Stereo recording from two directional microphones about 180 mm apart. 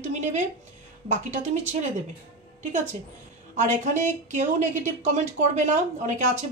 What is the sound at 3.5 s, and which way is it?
A woman's voice, 40° right (ahead or behind).